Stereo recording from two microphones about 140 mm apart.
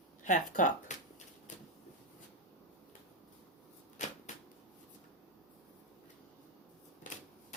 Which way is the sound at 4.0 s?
60° left (ahead or behind).